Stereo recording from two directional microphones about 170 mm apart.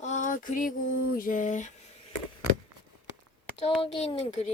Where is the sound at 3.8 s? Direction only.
35° left (ahead or behind).